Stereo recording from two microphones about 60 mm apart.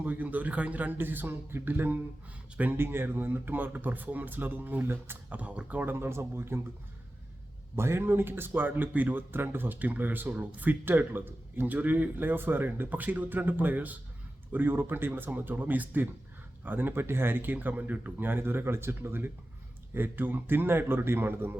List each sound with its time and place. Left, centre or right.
0.0 s a man's voice: right
5.3 s a man's voice: right
7.8 s a man's voice: right